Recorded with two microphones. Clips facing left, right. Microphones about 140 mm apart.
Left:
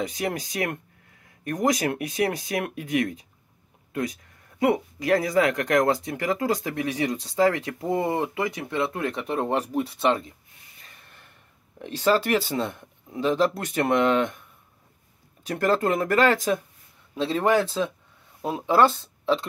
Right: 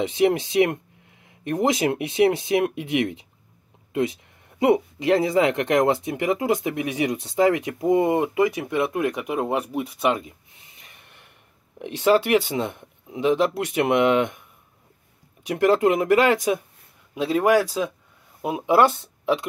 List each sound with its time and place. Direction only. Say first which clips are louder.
0.0 s speech: right 8 dB; 25° right (ahead or behind)
10.8 s snort: even; 20° right (ahead or behind)
11.8 s speech: right 3 dB; 15° right (ahead or behind)
15.4 s speech: right 4 dB; 15° right (ahead or behind)